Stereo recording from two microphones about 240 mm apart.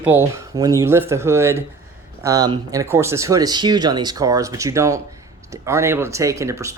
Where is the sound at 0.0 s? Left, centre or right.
Centre.